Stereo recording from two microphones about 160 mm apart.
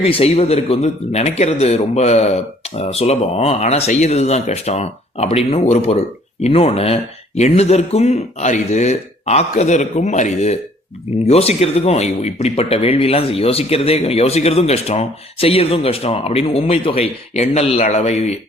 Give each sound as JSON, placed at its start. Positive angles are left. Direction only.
{"t": 0.0, "sound": "speech", "side_deg": 40}